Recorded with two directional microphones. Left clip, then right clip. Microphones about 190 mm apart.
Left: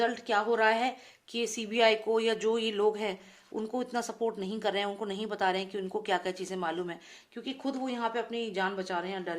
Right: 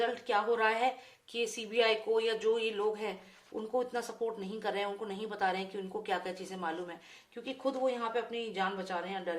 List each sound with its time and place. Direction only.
0.0 s a woman's voice: 45° left (ahead or behind)